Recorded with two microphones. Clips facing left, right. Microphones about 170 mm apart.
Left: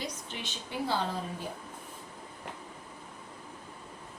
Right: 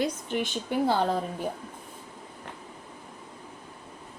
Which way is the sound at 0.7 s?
50° right (ahead or behind).